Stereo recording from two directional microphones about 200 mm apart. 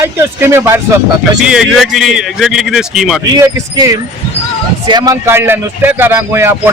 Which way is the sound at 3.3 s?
15° right (ahead or behind).